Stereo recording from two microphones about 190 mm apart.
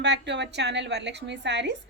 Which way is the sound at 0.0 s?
65° right (ahead or behind).